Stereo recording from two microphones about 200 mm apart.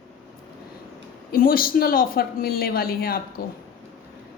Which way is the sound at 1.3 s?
45° left (ahead or behind).